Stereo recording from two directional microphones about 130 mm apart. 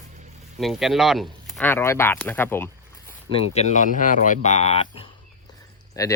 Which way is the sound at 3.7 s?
85° left.